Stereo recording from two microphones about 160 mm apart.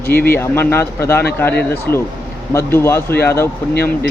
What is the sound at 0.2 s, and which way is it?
Speech, 15° left (ahead or behind).